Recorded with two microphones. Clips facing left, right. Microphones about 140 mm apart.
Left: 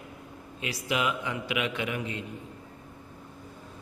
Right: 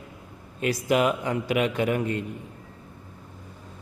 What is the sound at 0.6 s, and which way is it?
A man's voice, 45° right (ahead or behind).